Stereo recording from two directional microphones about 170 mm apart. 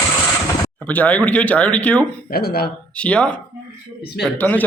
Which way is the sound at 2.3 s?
65° left (ahead or behind).